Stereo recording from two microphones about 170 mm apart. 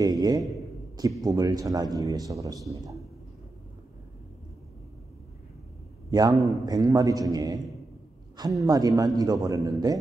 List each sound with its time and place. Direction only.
0.0 s a man's voice: 20° right (ahead or behind)
6.4 s a man's voice: 20° right (ahead or behind)